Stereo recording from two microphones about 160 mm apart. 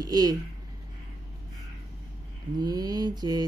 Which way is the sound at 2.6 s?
25° right (ahead or behind).